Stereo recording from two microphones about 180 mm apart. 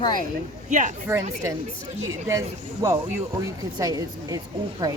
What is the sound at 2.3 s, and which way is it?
Speech, 15° right (ahead or behind).